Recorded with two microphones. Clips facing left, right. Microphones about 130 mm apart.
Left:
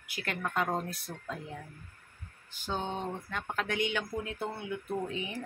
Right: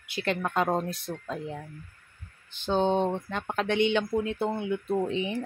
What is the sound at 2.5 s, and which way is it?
Speech, 25° right (ahead or behind).